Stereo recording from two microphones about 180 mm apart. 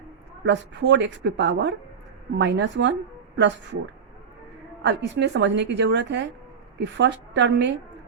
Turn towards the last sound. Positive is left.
turn(degrees=-80)